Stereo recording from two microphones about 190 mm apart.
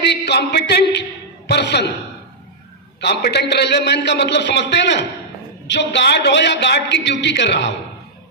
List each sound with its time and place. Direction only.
0.0 s a sound: 60° left (ahead or behind)
1.5 s a man's voice: 60° left (ahead or behind)
3.0 s a man's voice: 60° left (ahead or behind)